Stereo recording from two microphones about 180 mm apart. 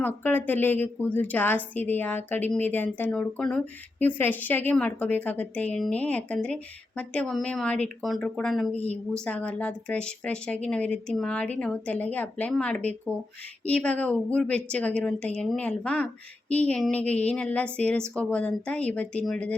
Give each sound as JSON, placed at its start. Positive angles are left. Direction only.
{"t": 0.0, "sound": "a woman's voice", "side_deg": 10}
{"t": 8.7, "sound": "a woman's voice", "side_deg": 35}
{"t": 9.2, "sound": "a woman's voice", "side_deg": 10}